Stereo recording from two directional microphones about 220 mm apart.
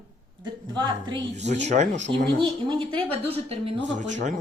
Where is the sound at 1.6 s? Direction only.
30° right (ahead or behind).